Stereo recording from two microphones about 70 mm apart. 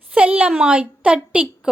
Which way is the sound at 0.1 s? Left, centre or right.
Centre.